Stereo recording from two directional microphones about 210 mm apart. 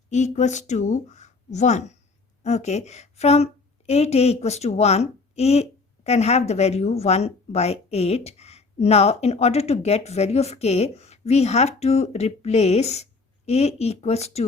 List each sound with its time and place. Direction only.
0.1 s a woman's voice: 35° left (ahead or behind)